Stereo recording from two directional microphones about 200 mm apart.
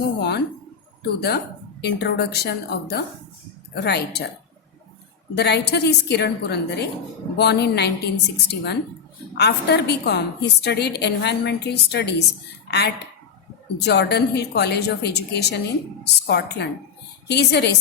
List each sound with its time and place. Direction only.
0.2 s a sound: 55° left (ahead or behind)
1.8 s a woman's voice: 55° left (ahead or behind)
5.3 s a woman's voice: 55° left (ahead or behind)